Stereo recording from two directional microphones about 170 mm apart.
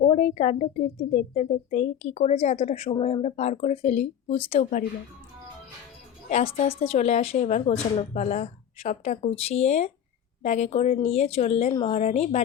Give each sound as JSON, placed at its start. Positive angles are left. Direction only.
{"t": 0.1, "sound": "speech", "side_deg": 40}
{"t": 6.2, "sound": "a woman's voice", "side_deg": 40}